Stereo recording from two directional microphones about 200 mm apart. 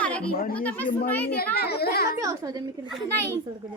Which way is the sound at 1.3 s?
50° left (ahead or behind).